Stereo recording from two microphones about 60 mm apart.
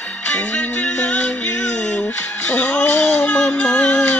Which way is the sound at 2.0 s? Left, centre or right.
Left.